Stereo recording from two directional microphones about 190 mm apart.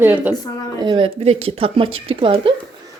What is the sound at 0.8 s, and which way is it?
A woman's voice, 25° right (ahead or behind).